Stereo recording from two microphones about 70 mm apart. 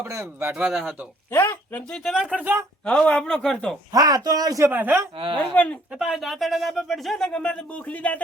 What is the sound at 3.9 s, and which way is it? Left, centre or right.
Speech, right.